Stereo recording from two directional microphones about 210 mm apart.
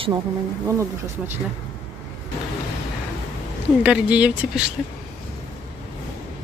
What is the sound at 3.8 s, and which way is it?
Speech, 5° right (ahead or behind).